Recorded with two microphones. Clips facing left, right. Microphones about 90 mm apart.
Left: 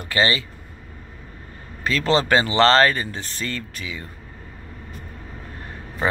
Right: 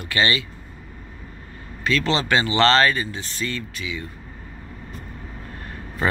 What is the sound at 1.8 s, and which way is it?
Speech, 40° left (ahead or behind).